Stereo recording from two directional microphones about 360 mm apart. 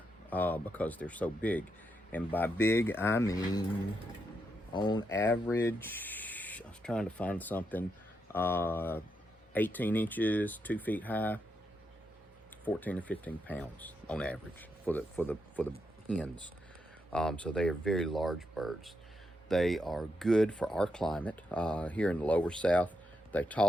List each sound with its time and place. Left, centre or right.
0.3 s speech: centre
4.7 s speech: centre
12.6 s speech: centre